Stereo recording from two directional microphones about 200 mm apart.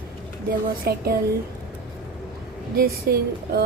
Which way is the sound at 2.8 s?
50° right (ahead or behind).